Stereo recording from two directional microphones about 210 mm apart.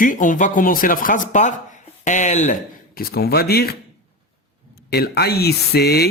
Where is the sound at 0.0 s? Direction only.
40° left (ahead or behind).